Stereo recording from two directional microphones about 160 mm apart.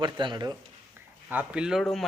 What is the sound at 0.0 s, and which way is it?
Speech, 30° right (ahead or behind).